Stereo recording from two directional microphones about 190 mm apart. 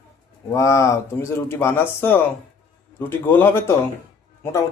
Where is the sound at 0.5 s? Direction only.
15° left (ahead or behind).